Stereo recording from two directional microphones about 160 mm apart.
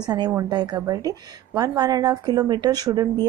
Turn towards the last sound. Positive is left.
turn(degrees=-25)  # may be behind; listen again after turning